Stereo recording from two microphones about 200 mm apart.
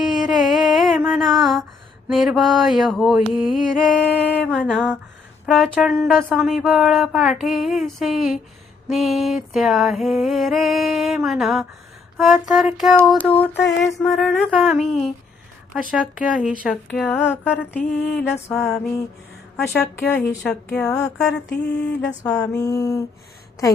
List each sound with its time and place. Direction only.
0.0 s a sound: centre (ahead or behind)
2.1 s speech: centre (ahead or behind)
13.1 s mantra: 5° left (ahead or behind)
13.8 s speech: centre (ahead or behind)
18.5 s mantra: 5° left (ahead or behind)
19.7 s speech: 5° left (ahead or behind)
21.8 s mantra: 5° left (ahead or behind)